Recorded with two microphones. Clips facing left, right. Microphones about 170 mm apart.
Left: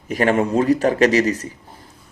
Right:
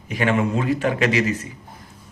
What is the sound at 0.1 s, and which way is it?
A man's voice, 40° left (ahead or behind).